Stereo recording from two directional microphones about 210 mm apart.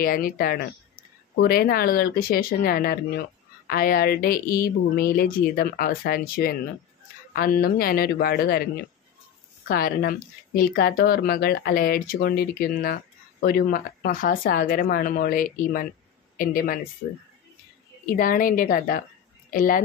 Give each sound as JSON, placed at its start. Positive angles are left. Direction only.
{"t": 0.0, "sound": "speech", "side_deg": 45}
{"t": 9.7, "sound": "a woman's voice", "side_deg": 45}
{"t": 18.1, "sound": "a woman's voice", "side_deg": 40}